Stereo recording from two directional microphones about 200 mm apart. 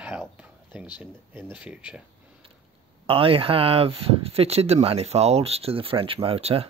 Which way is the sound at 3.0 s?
25° right (ahead or behind).